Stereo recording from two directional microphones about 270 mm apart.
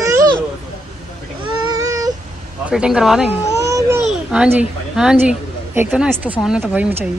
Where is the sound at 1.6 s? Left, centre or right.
Centre.